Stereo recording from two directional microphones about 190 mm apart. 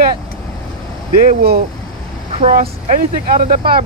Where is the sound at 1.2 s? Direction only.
50° right (ahead or behind).